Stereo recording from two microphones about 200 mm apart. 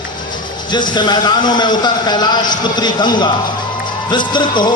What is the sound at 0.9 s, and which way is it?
A man's voice, 20° left (ahead or behind).